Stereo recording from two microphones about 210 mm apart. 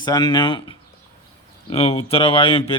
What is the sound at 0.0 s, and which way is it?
A man's voice, 20° left (ahead or behind).